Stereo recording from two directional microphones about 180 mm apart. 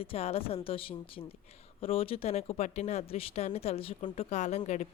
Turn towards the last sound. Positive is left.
turn(degrees=40)  # may be behind; listen again after turning